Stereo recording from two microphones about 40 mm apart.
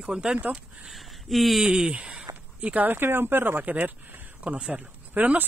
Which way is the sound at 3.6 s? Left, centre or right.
Right.